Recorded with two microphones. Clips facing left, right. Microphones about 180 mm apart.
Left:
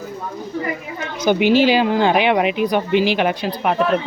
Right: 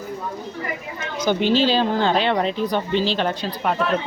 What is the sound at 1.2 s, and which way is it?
Speech, 10° left (ahead or behind).